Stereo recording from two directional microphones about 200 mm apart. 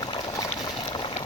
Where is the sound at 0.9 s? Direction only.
25° left (ahead or behind).